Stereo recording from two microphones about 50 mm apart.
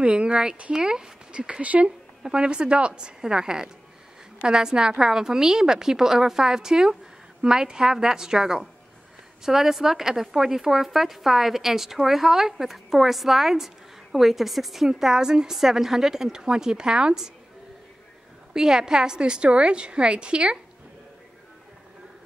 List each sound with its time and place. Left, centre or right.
0.0 s a woman's voice: right
18.5 s a woman's voice: centre